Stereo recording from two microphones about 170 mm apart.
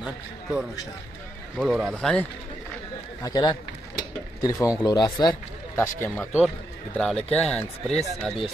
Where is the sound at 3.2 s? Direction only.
25° left (ahead or behind).